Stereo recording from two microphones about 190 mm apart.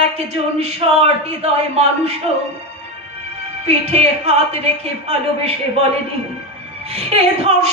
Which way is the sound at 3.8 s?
30° right (ahead or behind).